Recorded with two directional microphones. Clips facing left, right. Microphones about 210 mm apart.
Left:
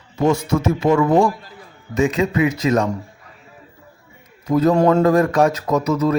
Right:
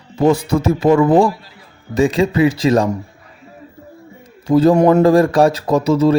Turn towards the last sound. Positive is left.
turn(degrees=-30)  # may be behind; listen again after turning